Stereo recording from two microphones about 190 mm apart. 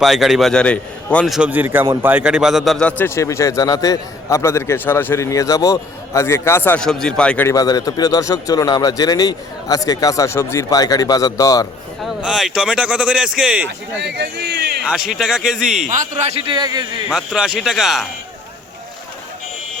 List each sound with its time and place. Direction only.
0.0 s a man's voice: centre (ahead or behind); by 11.7 s 20° left (ahead or behind)
12.0 s speech: 5° right (ahead or behind)
14.0 s a man's voice: 65° right (ahead or behind)
14.8 s speech: 5° right (ahead or behind)
15.9 s a man's voice: 35° right (ahead or behind); by 16.8 s 20° right (ahead or behind)
17.1 s speech: 5° right (ahead or behind)